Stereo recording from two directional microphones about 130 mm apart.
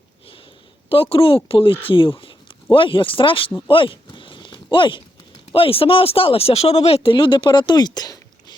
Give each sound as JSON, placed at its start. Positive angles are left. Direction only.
{"t": 1.1, "sound": "speech", "side_deg": 45}
{"t": 3.7, "sound": "a sound", "side_deg": 40}
{"t": 5.5, "sound": "speech", "side_deg": 45}